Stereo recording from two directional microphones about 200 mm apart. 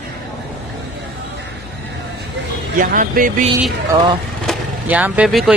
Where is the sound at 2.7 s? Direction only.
40° right (ahead or behind).